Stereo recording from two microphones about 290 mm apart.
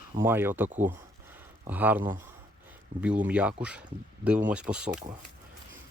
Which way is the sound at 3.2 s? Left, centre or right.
Centre.